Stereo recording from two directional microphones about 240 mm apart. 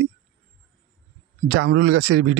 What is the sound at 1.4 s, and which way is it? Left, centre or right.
Speech, right.